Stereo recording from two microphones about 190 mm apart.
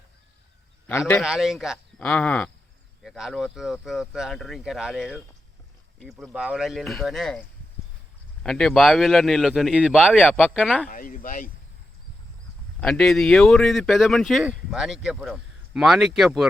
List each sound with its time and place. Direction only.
0.9 s a man's voice: 10° left (ahead or behind)
1.2 s speech: 5° right (ahead or behind)
8.4 s speech: centre (ahead or behind)
10.8 s speech: 45° left (ahead or behind)
12.8 s speech: 5° left (ahead or behind)